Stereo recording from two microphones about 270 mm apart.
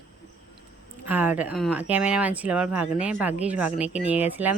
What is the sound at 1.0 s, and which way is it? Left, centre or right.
Speech, centre.